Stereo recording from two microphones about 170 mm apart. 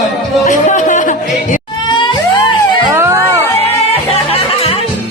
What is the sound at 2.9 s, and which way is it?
Music, 15° right (ahead or behind).